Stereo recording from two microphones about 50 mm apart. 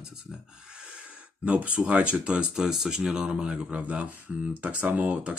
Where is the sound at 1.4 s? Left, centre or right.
Right.